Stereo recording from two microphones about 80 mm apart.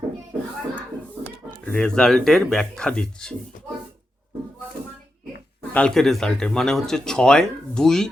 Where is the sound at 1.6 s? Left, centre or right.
Centre.